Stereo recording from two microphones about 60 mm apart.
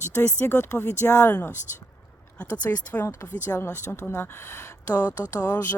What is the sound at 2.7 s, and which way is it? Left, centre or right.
Speech, left.